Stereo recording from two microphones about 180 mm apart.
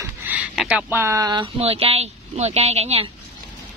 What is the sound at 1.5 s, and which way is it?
Speech, 35° right (ahead or behind).